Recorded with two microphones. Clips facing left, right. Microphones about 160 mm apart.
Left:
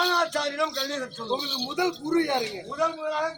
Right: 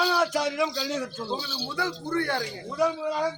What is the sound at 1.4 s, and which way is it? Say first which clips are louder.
Speech: left 4 dB; 15° left (ahead or behind).